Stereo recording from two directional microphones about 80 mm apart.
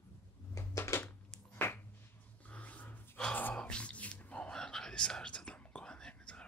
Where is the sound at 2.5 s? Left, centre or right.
Centre.